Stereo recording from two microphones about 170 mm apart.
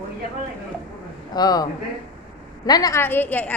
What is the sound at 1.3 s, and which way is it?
Speech, 25° left (ahead or behind).